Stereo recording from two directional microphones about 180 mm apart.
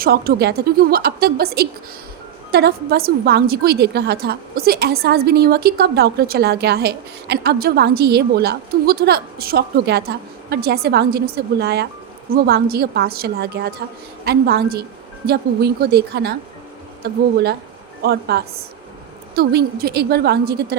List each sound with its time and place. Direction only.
0.0 s a woman's voice: 55° right (ahead or behind)